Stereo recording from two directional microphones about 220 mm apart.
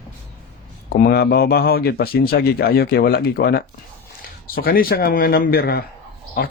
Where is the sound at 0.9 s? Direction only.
45° left (ahead or behind).